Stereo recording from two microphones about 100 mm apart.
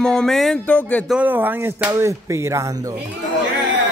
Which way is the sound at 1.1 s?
15° right (ahead or behind).